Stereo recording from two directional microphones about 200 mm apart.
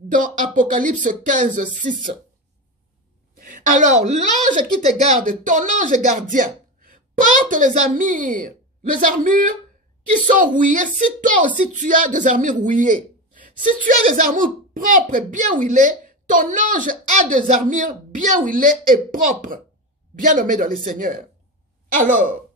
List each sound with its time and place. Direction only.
0.1 s speech: 40° right (ahead or behind)
3.3 s a woman's voice: 40° right (ahead or behind)